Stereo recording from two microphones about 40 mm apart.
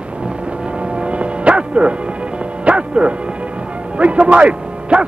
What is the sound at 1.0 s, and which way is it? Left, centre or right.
Music, right.